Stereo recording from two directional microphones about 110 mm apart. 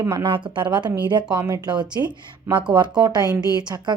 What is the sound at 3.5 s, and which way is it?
Speech, 40° right (ahead or behind).